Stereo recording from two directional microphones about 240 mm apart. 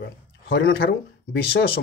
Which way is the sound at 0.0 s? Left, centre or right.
Left.